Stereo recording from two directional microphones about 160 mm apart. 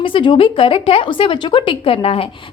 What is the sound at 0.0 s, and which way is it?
A woman's voice, 30° left (ahead or behind).